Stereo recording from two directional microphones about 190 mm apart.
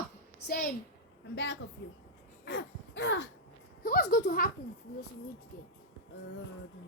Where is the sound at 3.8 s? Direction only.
50° left (ahead or behind).